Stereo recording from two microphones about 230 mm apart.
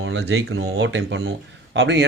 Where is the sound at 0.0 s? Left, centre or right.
Right.